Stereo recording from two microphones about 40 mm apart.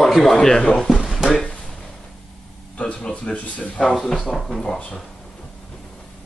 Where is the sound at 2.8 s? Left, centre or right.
Left.